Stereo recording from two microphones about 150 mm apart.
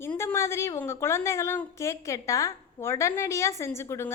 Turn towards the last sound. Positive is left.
turn(degrees=15)  # may be behind; listen again after turning